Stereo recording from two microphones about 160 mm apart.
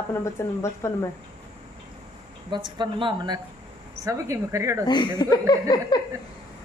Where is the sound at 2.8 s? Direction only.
30° right (ahead or behind).